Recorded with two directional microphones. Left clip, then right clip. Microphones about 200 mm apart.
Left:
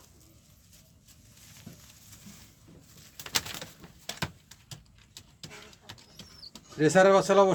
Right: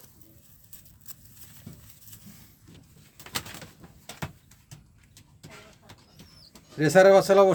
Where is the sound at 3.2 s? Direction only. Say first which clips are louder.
Left 4 dB; centre (ahead or behind).